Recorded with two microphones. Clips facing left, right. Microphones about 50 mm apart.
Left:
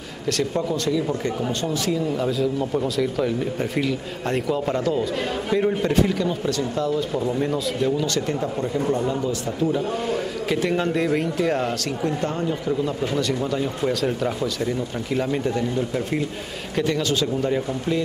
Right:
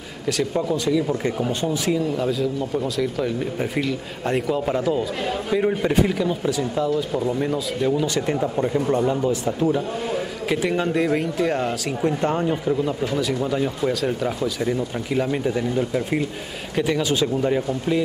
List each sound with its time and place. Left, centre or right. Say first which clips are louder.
0.3 s speech: right 1 dB; centre
1.2 s speech: right 2 dB; centre
2.1 s speech: even; centre; by 9.7 s right
9.7 s speech: even; centre
12.0 s speech: right 5 dB; right
13.1 s speech: right 1 dB; centre